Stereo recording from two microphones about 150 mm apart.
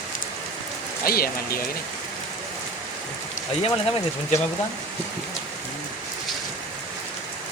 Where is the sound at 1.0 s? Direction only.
80° left.